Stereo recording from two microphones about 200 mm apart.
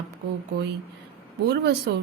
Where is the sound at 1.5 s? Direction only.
55° right (ahead or behind).